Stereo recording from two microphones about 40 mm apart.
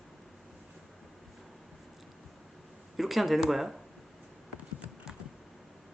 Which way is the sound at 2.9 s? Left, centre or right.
Centre.